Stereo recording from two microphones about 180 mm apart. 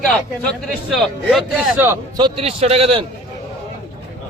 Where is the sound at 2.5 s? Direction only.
35° right (ahead or behind).